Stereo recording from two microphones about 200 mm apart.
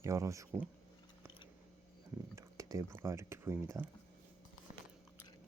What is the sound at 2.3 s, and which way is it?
Speech, 15° right (ahead or behind).